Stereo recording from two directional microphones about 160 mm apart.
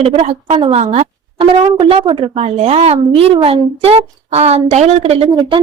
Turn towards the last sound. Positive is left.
turn(degrees=-40)  # may be behind; listen again after turning